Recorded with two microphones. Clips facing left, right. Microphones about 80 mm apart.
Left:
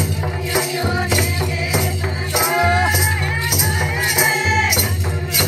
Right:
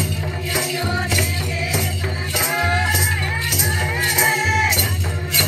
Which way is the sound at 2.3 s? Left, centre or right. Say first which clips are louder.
Left 5 dB; left.